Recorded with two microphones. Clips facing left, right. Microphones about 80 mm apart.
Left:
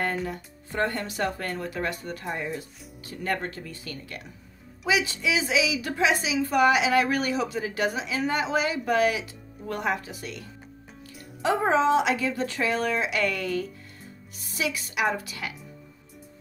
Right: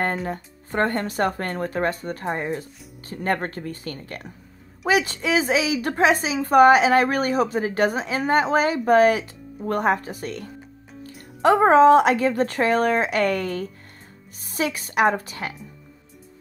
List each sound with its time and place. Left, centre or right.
0.0 s a woman's voice: right